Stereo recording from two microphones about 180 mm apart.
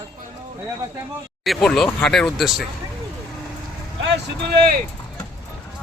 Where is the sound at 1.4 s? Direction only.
Centre (ahead or behind).